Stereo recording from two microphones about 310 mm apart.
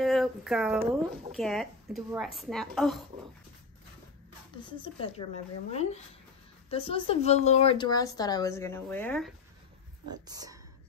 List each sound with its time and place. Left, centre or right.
0.0 s a woman's voice: centre
4.8 s speech: centre
10.2 s speech: centre